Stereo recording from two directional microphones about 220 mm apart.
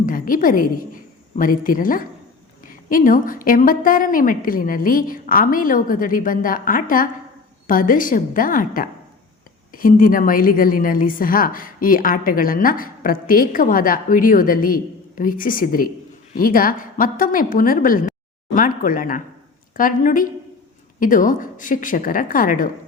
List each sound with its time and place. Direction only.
0.0 s a woman's voice: 40° left (ahead or behind)